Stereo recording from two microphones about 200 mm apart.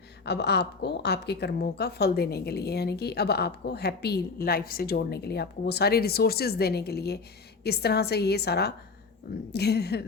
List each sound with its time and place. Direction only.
0.3 s a woman's voice: 55° left (ahead or behind)